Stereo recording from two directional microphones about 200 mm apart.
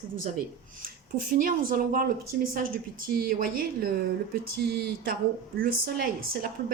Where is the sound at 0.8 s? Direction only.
45° right (ahead or behind).